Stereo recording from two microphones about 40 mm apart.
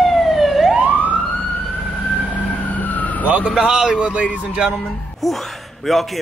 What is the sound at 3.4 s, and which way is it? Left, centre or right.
A man's voice, centre.